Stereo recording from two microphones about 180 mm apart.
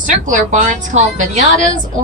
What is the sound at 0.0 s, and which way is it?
A woman's voice, 45° right (ahead or behind).